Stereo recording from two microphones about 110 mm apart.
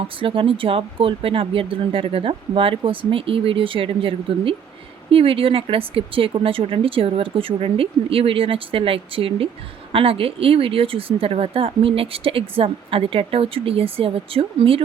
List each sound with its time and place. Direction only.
0.0 s speech: 55° right (ahead or behind)